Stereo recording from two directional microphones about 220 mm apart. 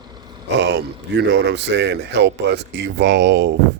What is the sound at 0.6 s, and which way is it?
Speech, 50° right (ahead or behind).